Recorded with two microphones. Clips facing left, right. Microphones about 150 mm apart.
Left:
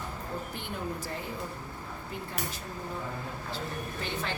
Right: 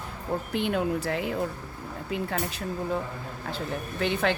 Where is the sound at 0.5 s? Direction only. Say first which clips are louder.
Right 10 dB; 90° right.